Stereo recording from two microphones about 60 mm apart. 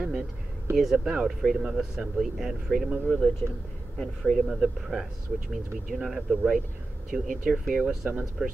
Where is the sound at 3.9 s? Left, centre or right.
Centre.